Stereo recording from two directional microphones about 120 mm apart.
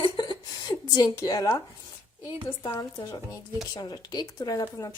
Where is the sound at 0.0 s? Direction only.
40° left (ahead or behind).